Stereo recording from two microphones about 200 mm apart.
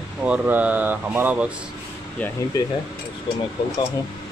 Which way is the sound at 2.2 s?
5° left (ahead or behind).